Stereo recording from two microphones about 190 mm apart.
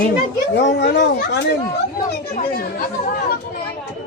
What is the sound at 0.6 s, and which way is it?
Speech, 65° left (ahead or behind).